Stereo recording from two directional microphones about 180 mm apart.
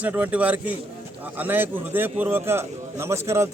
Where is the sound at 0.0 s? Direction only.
10° right (ahead or behind).